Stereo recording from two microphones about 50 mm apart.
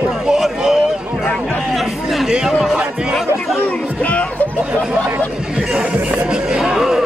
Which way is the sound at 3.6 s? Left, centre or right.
Left.